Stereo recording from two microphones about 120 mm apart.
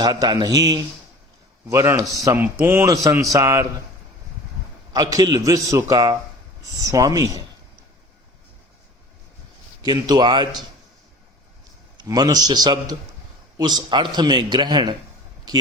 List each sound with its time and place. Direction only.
0.0 s a man's voice: 35° right (ahead or behind)
4.9 s a man's voice: 35° right (ahead or behind)
9.8 s a man's voice: 35° right (ahead or behind)
11.9 s a man's voice: 35° right (ahead or behind)